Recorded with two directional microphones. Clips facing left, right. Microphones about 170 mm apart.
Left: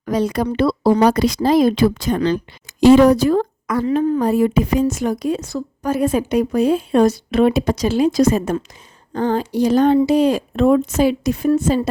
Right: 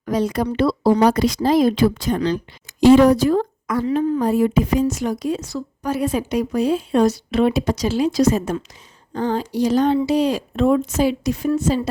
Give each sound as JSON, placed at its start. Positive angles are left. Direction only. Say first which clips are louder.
{"t": 0.0, "sound": "speech", "louder": "left 1 dB", "side_deg": 80}
{"t": 2.8, "sound": "a woman's voice", "louder": "left 1 dB", "side_deg": 85}